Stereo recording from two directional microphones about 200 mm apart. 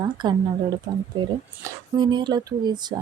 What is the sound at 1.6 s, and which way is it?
Speech, 20° right (ahead or behind).